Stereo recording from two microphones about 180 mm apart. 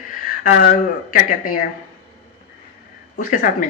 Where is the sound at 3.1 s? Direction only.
50° left (ahead or behind).